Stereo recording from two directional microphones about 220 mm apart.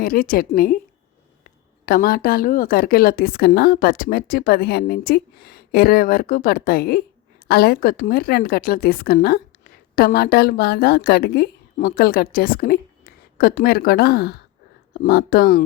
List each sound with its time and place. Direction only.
0.0 s a woman's voice: 40° left (ahead or behind)
1.8 s a woman's voice: 40° left (ahead or behind)